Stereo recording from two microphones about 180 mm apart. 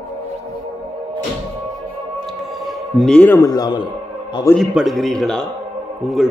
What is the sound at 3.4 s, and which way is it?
Speech, 20° left (ahead or behind).